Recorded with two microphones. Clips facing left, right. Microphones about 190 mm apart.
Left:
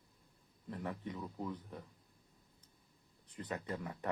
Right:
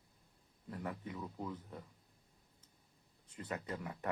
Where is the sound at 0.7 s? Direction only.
25° left (ahead or behind).